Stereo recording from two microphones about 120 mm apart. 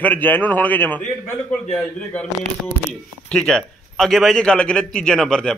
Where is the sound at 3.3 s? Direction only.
5° left (ahead or behind).